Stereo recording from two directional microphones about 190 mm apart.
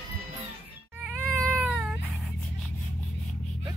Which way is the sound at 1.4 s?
5° left (ahead or behind).